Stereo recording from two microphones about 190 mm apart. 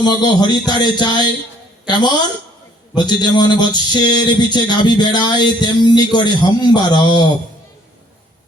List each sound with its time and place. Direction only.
0.0 s speech: 20° left (ahead or behind)